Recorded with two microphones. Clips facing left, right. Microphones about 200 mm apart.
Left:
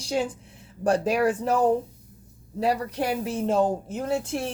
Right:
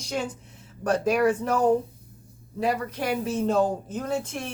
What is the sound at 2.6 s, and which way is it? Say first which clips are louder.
Speech: left 1 dB; 35° left (ahead or behind).